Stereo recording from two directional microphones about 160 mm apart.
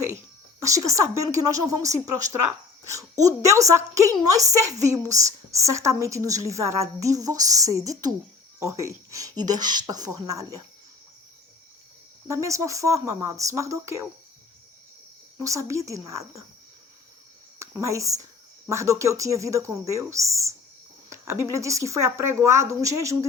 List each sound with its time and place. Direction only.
0.9 s a woman's voice: 20° right (ahead or behind)
12.3 s a woman's voice: 20° right (ahead or behind)
15.4 s a woman's voice: 20° right (ahead or behind)
17.6 s a woman's voice: 20° right (ahead or behind)
21.1 s a sound: 15° right (ahead or behind)
21.5 s a woman's voice: 20° right (ahead or behind)